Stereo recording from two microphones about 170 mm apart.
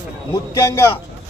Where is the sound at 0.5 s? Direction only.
20° left (ahead or behind).